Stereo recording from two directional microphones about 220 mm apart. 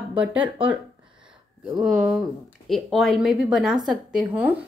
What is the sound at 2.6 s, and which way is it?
A woman's voice, centre (ahead or behind).